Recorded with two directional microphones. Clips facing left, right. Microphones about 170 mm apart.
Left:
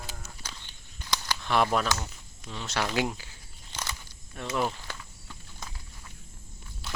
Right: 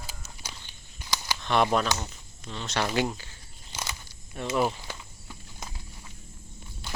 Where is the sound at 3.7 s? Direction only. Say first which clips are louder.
Right 1 dB; 10° right (ahead or behind).